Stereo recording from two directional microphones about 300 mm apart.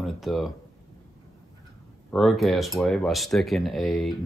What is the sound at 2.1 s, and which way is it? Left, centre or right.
Speech, centre.